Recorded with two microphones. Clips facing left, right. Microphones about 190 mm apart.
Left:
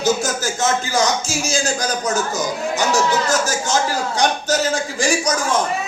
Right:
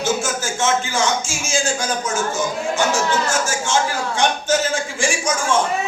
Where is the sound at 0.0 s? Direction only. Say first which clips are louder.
Left 2 dB; 40° left (ahead or behind).